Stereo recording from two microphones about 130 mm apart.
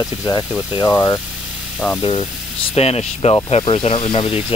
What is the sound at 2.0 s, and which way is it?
Speech, 45° left (ahead or behind).